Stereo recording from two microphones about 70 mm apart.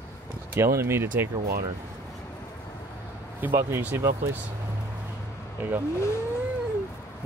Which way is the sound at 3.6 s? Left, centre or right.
Right.